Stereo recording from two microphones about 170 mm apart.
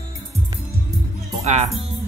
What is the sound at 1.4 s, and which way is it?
Speech, 40° right (ahead or behind).